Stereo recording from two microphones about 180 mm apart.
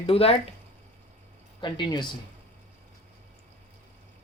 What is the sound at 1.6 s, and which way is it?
Speech, 25° left (ahead or behind).